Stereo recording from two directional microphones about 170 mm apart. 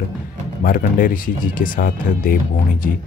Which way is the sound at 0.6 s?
55° left (ahead or behind).